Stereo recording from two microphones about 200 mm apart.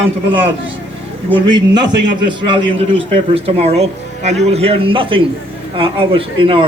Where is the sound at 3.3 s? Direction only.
30° right (ahead or behind).